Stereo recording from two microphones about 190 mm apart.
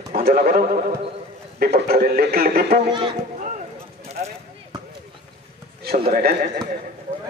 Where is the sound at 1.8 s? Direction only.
50° right (ahead or behind).